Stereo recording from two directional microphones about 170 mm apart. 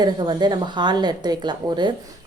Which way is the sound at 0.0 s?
25° right (ahead or behind).